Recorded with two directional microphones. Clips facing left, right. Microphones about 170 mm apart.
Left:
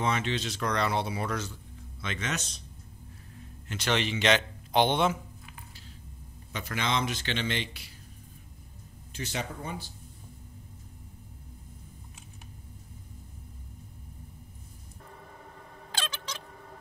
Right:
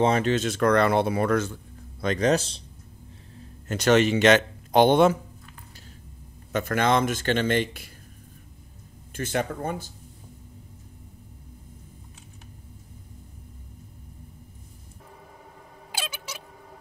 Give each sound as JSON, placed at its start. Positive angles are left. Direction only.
{"t": 0.0, "sound": "speech", "side_deg": -40}
{"t": 3.3, "sound": "speech", "side_deg": -45}
{"t": 6.5, "sound": "speech", "side_deg": -50}
{"t": 9.1, "sound": "speech", "side_deg": -55}
{"t": 15.0, "sound": "a sound", "side_deg": -10}